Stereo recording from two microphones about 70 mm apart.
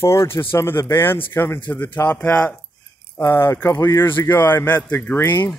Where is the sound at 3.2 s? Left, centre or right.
Left.